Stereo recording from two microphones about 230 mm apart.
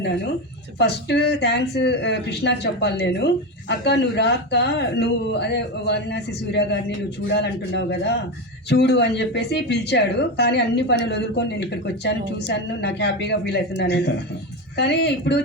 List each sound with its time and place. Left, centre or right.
0.8 s speech: left